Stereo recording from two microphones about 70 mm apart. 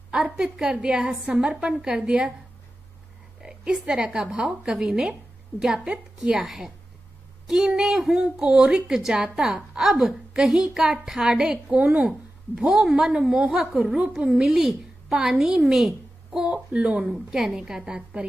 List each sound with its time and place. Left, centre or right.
0.1 s a woman's voice: centre
3.4 s a woman's voice: centre
6.1 s a woman's voice: centre
17.1 s a woman's voice: centre